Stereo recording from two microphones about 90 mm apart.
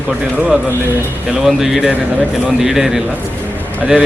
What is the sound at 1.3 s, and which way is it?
A man's voice, 5° right (ahead or behind).